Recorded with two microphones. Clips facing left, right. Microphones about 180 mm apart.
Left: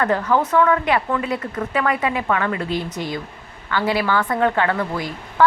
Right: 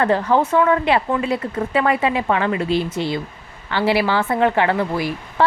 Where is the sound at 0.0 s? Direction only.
25° right (ahead or behind).